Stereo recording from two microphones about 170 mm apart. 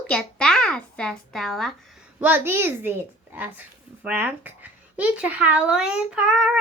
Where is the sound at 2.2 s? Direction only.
10° right (ahead or behind).